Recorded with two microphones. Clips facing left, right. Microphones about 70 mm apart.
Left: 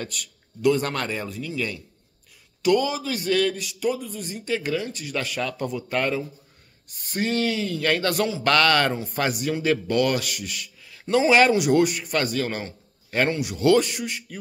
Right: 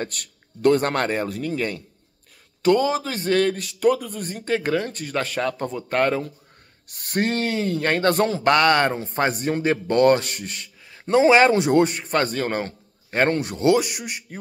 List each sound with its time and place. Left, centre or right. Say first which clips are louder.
0.0 s a man's voice: right 3 dB; right
6.9 s a man's voice: right 3 dB; right
8.5 s speech: right 2 dB; right
13.7 s speech: even; centre